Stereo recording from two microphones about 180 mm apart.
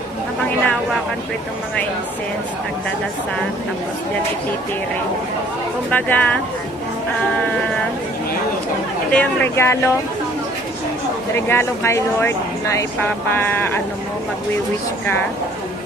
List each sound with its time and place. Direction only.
5.9 s speech: 10° left (ahead or behind)
9.0 s speech: 10° left (ahead or behind)
11.3 s speech: 10° left (ahead or behind)